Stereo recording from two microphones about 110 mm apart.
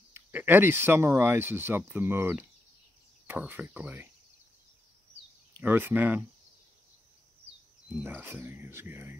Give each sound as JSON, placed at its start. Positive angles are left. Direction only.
{"t": 0.1, "sound": "speech", "side_deg": -20}
{"t": 5.6, "sound": "speech", "side_deg": -20}
{"t": 8.0, "sound": "speech", "side_deg": -15}